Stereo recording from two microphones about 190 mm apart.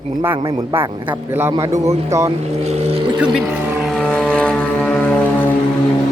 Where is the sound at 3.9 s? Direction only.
5° left (ahead or behind).